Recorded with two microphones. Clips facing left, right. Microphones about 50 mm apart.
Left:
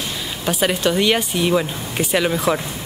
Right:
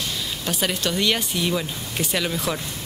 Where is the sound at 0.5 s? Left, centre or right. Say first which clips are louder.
Left 7 dB; centre.